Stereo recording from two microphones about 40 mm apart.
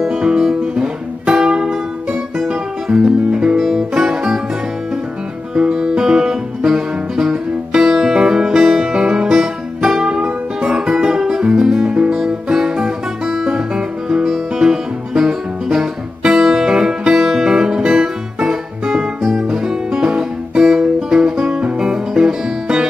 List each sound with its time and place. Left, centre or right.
0.0 s music: centre
0.7 s music: right
5.5 s music: centre
12.8 s music: centre
13.5 s guitar: centre
14.6 s music: centre
20.0 s guitar: centre
20.6 s music: centre